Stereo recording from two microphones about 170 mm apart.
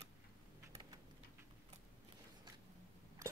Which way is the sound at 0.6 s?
15° right (ahead or behind).